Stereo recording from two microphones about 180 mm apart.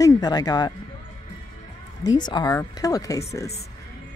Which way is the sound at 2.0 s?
25° left (ahead or behind).